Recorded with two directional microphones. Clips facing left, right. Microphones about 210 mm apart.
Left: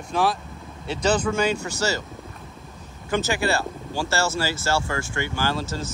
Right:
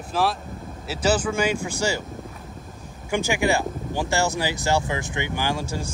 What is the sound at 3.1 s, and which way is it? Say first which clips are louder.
Speech: right 1 dB; 15° right (ahead or behind).